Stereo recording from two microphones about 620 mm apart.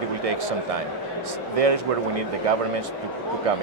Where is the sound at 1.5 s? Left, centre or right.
Right.